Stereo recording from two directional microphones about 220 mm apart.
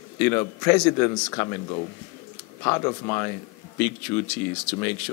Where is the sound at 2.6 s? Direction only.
20° left (ahead or behind).